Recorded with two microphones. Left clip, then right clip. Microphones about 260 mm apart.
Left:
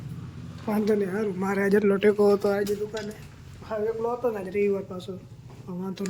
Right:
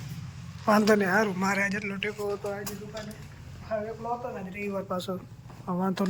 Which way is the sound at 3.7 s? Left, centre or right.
Centre.